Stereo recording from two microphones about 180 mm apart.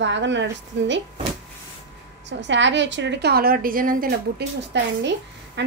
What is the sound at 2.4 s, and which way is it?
A woman's voice, 85° right.